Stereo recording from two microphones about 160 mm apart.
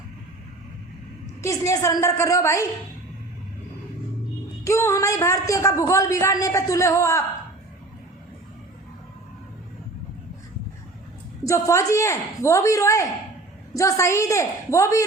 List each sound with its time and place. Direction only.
1.4 s speech: 20° left (ahead or behind)
4.6 s speech: 15° left (ahead or behind)
11.4 s speech: 20° left (ahead or behind)